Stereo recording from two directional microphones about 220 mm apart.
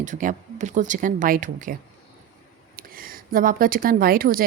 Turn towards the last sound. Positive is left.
turn(degrees=-40)  # may be behind; listen again after turning